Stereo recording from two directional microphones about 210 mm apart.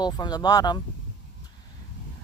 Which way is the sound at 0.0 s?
20° left (ahead or behind).